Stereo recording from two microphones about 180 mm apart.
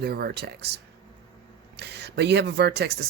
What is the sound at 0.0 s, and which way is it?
Speech, 60° right (ahead or behind).